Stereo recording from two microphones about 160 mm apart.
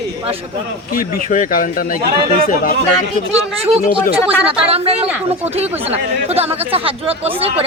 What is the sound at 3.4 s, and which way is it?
Speech, 40° right (ahead or behind).